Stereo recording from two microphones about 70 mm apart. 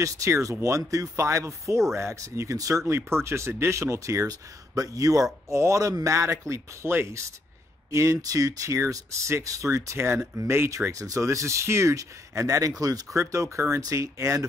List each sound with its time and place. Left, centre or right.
0.0 s speech: right
2.9 s speech: right
10.9 s speech: right
13.2 s speech: right